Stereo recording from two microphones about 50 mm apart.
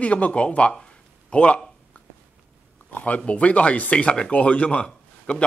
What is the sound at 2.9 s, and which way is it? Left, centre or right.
A man's voice, left.